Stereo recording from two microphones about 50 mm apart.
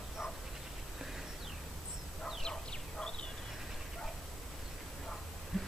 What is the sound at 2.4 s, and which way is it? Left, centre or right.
Bow-wow, centre.